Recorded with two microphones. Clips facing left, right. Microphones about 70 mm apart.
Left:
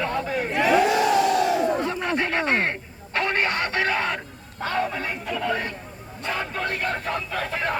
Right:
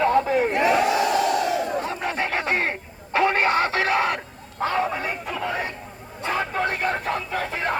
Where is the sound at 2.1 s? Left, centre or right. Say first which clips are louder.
Left 2 dB; centre.